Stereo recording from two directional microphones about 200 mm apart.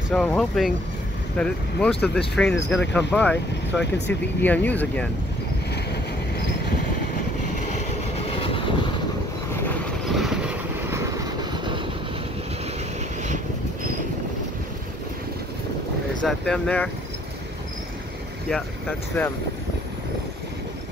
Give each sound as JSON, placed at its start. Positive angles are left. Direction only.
{"t": 0.1, "sound": "speech", "side_deg": 5}
{"t": 7.6, "sound": "vehicle", "side_deg": 30}
{"t": 10.0, "sound": "vehicle", "side_deg": 0}
{"t": 16.3, "sound": "speech", "side_deg": 5}
{"t": 18.5, "sound": "speech", "side_deg": 5}